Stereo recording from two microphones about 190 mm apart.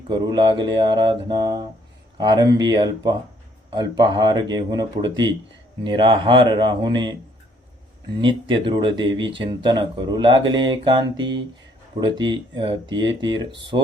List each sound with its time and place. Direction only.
0.1 s speech: 25° right (ahead or behind)
8.2 s speech: 25° right (ahead or behind)